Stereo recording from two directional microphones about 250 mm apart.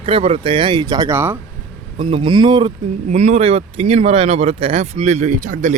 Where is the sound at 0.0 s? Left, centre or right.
Right.